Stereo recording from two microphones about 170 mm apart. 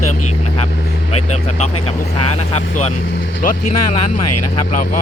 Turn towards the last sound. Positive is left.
turn(degrees=40)  # may be behind; listen again after turning